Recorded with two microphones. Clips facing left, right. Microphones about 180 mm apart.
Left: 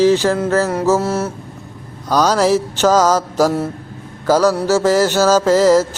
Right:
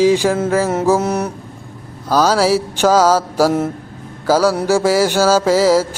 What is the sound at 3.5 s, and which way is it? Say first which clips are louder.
Speech: right 2 dB; 20° right (ahead or behind).